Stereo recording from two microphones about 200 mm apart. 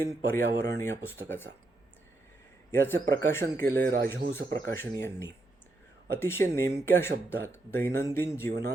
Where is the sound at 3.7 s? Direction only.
50° right (ahead or behind).